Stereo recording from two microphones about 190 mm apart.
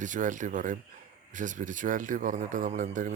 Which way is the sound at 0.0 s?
40° right (ahead or behind).